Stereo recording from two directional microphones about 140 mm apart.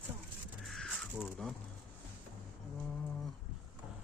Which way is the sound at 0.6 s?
Centre (ahead or behind).